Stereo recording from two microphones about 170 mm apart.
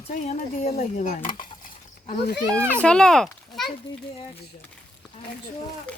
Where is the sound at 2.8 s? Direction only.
5° left (ahead or behind).